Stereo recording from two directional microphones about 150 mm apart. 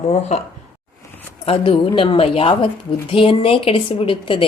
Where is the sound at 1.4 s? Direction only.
40° left (ahead or behind).